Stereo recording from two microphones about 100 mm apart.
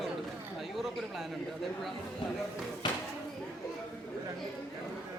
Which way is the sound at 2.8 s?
50° left (ahead or behind).